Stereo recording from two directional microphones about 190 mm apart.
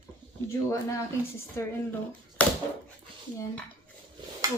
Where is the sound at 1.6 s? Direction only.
15° left (ahead or behind).